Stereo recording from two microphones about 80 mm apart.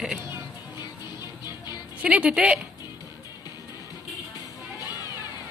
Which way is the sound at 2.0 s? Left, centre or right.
Centre.